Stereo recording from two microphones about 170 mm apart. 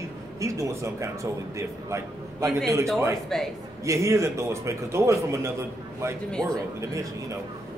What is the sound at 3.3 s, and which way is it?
Speech, 5° left (ahead or behind).